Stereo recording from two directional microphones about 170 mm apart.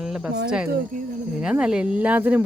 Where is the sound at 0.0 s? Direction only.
5° right (ahead or behind).